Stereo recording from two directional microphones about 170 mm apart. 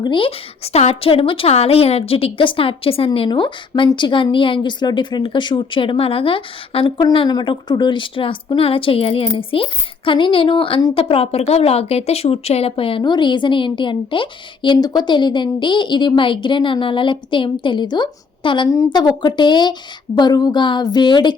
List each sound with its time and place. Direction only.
0.0 s a woman's voice: 30° left (ahead or behind)